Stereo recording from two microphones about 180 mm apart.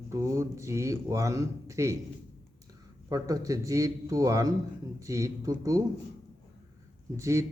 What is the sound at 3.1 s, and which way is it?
Speech, 20° right (ahead or behind).